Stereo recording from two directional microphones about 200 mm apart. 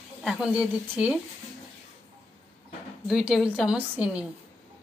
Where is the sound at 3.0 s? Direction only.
Centre (ahead or behind).